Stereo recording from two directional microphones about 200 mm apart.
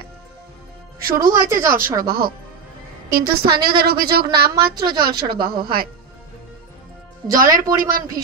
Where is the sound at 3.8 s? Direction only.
50° right (ahead or behind).